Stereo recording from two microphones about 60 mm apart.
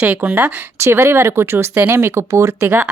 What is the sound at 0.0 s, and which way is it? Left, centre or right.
Speech, right.